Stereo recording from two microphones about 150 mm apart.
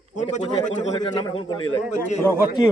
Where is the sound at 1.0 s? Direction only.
30° left (ahead or behind).